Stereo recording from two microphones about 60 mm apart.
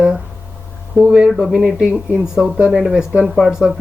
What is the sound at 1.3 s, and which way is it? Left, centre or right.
Speech, centre.